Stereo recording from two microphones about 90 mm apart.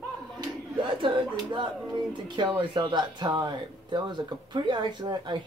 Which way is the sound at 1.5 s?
60° right (ahead or behind).